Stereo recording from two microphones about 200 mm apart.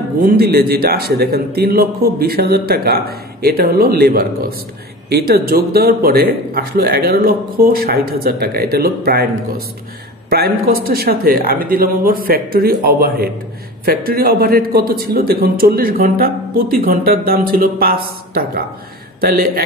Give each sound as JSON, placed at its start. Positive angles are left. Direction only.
{"t": 0.2, "sound": "a man's voice", "side_deg": -45}
{"t": 10.3, "sound": "a man's voice", "side_deg": -50}